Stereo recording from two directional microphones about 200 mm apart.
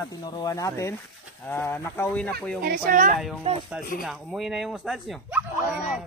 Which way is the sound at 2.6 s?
50° right (ahead or behind).